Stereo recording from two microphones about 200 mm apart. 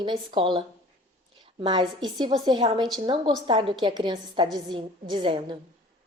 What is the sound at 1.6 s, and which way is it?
A woman's voice, 25° right (ahead or behind).